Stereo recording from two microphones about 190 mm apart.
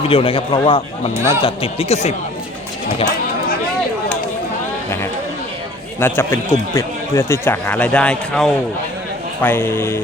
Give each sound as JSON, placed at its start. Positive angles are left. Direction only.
{"t": 0.1, "sound": "speech", "side_deg": 30}
{"t": 6.0, "sound": "a man's voice", "side_deg": 10}